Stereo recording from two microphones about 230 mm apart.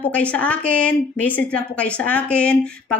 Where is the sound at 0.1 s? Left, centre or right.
Centre.